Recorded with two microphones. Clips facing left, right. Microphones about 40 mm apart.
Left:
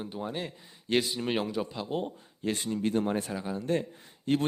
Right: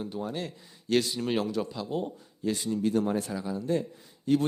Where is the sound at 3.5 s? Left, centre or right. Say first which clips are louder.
Right 1 dB; left.